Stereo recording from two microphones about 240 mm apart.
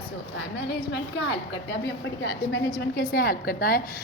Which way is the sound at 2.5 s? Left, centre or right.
Left.